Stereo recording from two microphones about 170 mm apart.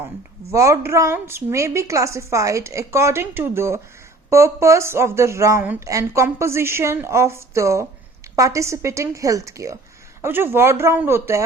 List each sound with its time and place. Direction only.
0.5 s a woman's voice: 20° right (ahead or behind)